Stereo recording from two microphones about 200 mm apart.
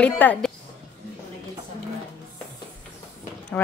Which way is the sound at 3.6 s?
5° left (ahead or behind).